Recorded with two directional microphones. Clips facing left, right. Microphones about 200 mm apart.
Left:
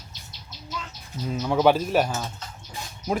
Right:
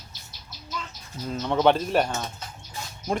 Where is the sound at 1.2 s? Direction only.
5° left (ahead or behind).